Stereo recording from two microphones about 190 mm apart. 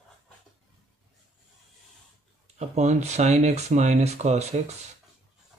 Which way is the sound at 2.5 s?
35° right (ahead or behind).